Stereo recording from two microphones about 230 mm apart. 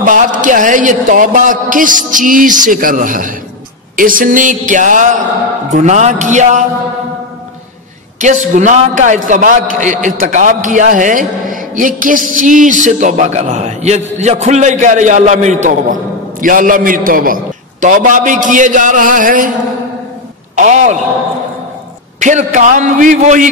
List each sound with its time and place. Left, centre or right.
0.0 s a man's voice: right
8.2 s a man's voice: right
20.5 s a man's voice: right
22.2 s a man's voice: right